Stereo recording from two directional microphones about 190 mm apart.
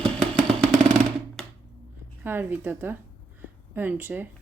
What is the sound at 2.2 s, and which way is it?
Speech, 10° right (ahead or behind).